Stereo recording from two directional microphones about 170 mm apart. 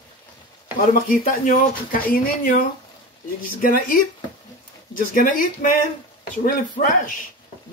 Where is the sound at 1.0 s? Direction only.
50° left (ahead or behind).